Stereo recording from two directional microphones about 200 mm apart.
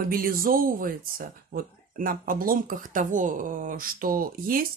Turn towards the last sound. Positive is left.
turn(degrees=-45)  # may be behind; listen again after turning